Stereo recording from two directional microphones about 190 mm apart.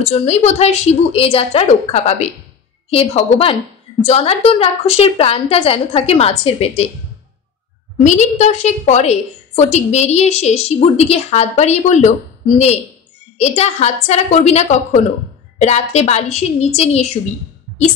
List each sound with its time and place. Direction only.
0.0 s a woman's voice: 35° left (ahead or behind)
8.0 s a woman's voice: 40° left (ahead or behind)